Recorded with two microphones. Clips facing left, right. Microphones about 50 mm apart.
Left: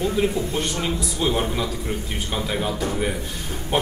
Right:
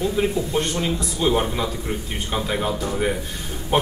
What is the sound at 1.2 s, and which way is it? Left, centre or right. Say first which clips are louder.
Speech: right 3 dB; centre.